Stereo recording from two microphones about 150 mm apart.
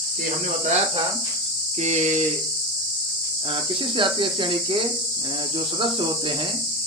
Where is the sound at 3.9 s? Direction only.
35° right (ahead or behind).